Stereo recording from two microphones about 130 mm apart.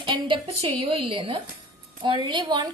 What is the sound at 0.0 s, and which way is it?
A woman's voice, 40° right (ahead or behind).